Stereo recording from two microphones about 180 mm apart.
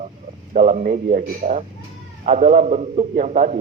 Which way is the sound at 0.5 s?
40° right (ahead or behind).